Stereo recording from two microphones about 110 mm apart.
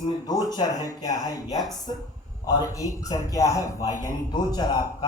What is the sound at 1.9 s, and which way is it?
Speech, 45° left (ahead or behind).